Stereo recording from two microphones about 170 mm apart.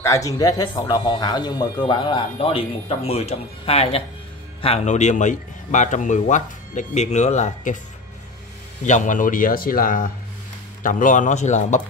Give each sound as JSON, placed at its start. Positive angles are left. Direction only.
{"t": 0.0, "sound": "a man's voice", "side_deg": 20}
{"t": 8.8, "sound": "a man's voice", "side_deg": 45}